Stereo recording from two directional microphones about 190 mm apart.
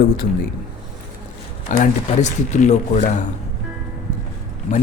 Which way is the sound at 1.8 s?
40° left (ahead or behind).